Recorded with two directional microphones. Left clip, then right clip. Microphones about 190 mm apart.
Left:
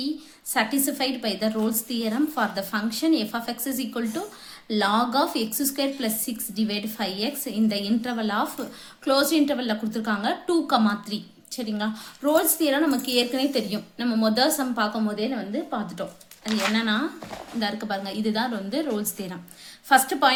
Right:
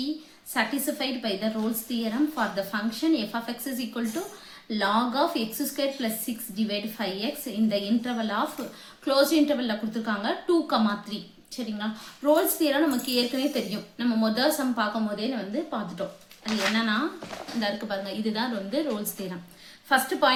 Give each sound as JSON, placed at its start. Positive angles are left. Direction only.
{"t": 0.5, "sound": "a woman's voice", "side_deg": 40}